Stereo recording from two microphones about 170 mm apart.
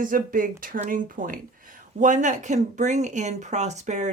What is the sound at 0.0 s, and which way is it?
Speech, 55° right (ahead or behind).